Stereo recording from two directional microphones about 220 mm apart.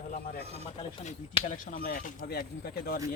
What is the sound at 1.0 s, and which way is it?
Speech, 35° left (ahead or behind).